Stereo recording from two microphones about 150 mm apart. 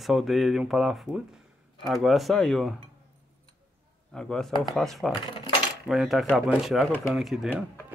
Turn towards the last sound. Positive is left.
turn(degrees=-5)  # may be behind; listen again after turning